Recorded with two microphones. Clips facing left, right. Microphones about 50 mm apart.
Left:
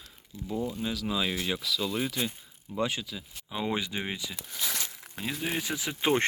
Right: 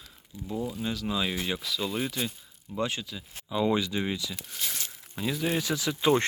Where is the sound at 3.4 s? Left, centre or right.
Left.